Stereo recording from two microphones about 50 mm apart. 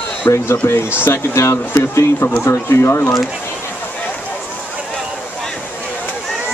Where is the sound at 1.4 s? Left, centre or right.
Left.